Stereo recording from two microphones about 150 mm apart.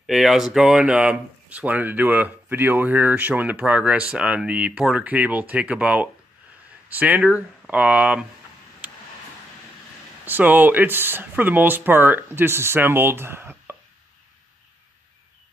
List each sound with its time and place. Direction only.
0.0 s speech: centre (ahead or behind)
10.2 s speech: 10° right (ahead or behind)